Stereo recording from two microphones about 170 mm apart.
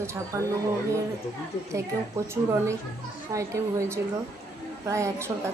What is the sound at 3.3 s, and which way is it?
A woman's voice, 15° right (ahead or behind).